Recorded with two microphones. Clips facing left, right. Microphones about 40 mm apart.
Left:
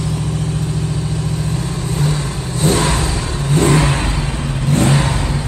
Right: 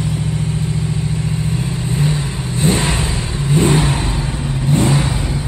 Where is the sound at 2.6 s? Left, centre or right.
Right.